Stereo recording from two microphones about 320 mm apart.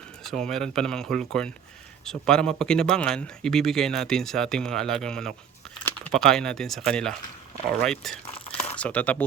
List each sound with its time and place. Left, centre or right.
0.2 s speech: centre
8.4 s a sound: centre
8.7 s speech: centre